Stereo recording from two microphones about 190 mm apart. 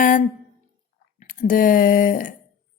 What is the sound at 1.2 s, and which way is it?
Speech, 45° left (ahead or behind).